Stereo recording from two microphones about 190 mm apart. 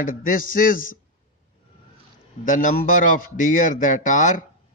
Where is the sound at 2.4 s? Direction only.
45° left (ahead or behind).